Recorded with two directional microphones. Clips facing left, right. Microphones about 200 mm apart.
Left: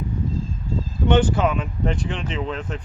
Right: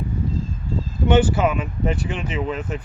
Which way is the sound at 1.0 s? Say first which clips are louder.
Right 1 dB; 5° right (ahead or behind).